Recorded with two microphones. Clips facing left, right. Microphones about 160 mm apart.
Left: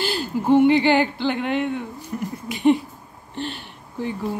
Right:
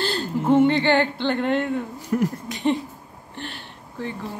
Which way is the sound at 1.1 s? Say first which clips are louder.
Right 1 dB; 5° left (ahead or behind).